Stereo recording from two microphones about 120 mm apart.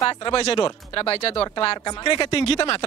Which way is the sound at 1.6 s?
40° left (ahead or behind).